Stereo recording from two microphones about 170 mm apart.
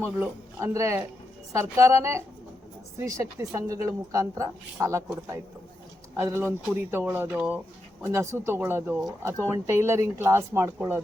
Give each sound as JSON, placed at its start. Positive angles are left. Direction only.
{"t": 0.0, "sound": "a woman's voice", "side_deg": -15}